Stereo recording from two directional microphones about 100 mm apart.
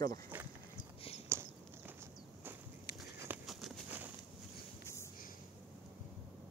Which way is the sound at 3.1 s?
20° right (ahead or behind).